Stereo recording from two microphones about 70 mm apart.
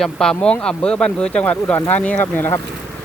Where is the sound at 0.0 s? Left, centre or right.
Centre.